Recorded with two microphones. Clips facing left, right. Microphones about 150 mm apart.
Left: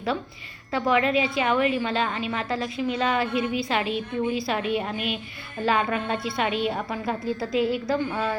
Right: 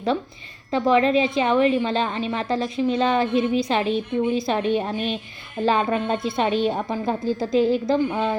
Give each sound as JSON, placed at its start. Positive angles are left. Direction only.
{"t": 0.7, "sound": "a woman's voice", "side_deg": -25}
{"t": 6.5, "sound": "a woman's voice", "side_deg": -35}
{"t": 6.9, "sound": "a woman's voice", "side_deg": -25}